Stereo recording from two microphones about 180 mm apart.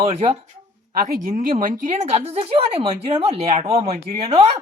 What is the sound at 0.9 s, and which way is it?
Speech, 55° right (ahead or behind).